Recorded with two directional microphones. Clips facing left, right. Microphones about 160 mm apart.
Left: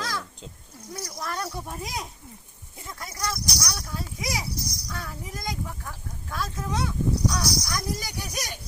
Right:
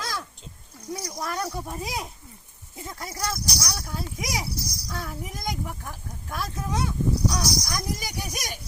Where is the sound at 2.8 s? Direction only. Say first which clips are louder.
Right 1 dB; 20° right (ahead or behind).